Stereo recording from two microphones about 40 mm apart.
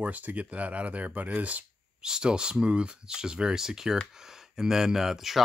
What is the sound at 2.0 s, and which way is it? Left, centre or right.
Speech, centre.